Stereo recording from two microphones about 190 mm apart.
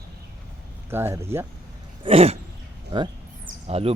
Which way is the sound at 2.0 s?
30° right (ahead or behind).